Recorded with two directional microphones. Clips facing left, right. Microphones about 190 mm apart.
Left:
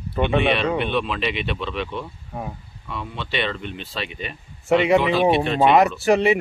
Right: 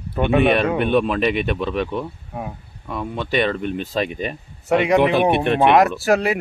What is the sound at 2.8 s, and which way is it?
Speech, 45° right (ahead or behind).